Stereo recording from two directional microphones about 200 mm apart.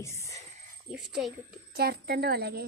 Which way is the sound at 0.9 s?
Centre (ahead or behind).